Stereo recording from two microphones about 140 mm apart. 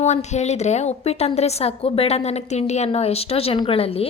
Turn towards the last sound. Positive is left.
turn(degrees=45)  # may be behind; listen again after turning